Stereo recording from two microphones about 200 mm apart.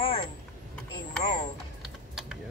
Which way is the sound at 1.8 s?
Centre (ahead or behind).